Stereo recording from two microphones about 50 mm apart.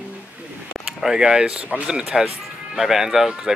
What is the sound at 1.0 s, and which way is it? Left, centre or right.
Speech, centre.